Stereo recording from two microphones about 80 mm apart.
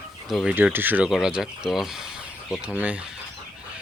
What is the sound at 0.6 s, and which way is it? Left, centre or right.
Speech, right.